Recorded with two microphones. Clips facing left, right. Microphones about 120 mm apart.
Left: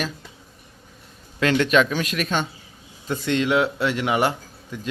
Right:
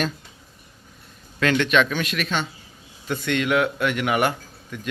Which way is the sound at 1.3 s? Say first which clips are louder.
Left 1 dB; 25° left (ahead or behind).